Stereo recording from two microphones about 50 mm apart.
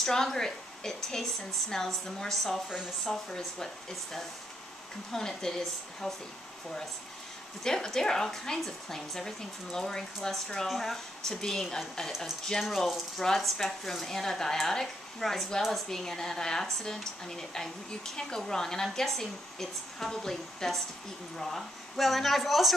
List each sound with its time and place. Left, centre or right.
0.0 s a woman's voice: centre
7.6 s a woman's voice: centre
13.2 s a woman's voice: centre